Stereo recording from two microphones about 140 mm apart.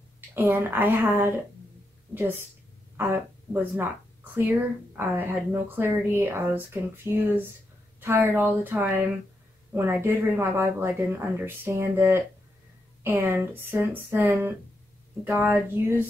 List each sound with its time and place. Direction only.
0.3 s speech: 15° right (ahead or behind)
3.7 s speech: 15° right (ahead or behind)